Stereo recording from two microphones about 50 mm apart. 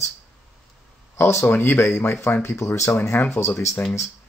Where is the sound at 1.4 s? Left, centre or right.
Left.